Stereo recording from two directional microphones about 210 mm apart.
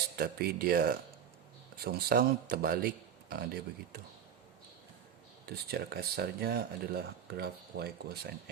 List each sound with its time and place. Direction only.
0.2 s speech: 45° right (ahead or behind)
5.5 s speech: 50° right (ahead or behind)